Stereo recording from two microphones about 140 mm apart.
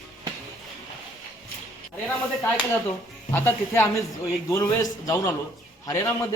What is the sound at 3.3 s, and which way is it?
Speech, 15° left (ahead or behind).